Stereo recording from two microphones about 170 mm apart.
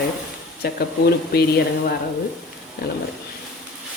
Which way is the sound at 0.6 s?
65° left (ahead or behind).